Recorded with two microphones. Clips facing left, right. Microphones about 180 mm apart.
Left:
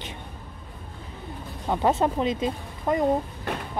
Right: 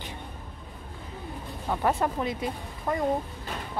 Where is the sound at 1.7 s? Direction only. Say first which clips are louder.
Left 4 dB; 20° left (ahead or behind).